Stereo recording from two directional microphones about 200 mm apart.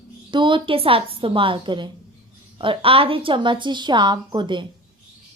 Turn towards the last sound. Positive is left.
turn(degrees=-25)  # may be behind; listen again after turning